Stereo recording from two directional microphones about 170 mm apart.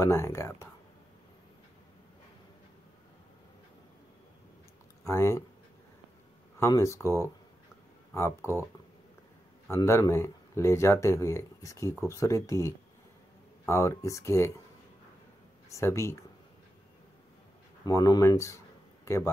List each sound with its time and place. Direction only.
0.0 s speech: 15° left (ahead or behind)
5.0 s speech: 15° left (ahead or behind)
6.6 s speech: 20° left (ahead or behind)
9.7 s speech: 15° left (ahead or behind)
15.7 s speech: 15° left (ahead or behind)
17.8 s speech: 20° left (ahead or behind)